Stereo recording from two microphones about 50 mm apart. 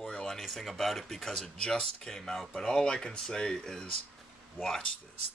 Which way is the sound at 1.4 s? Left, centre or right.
Centre.